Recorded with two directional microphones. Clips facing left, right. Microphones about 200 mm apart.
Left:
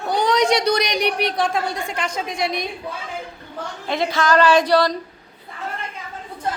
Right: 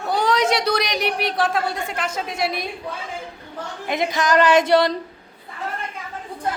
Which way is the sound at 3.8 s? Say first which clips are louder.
Left 1 dB; 20° right (ahead or behind).